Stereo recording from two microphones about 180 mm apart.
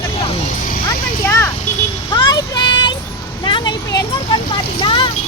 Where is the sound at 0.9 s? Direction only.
15° left (ahead or behind).